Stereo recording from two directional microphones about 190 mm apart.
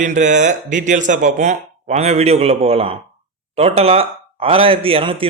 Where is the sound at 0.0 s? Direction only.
40° right (ahead or behind).